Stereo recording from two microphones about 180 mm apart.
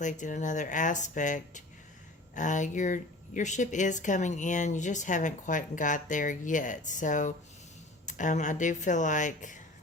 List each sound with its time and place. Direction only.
0.0 s speech: 45° left (ahead or behind)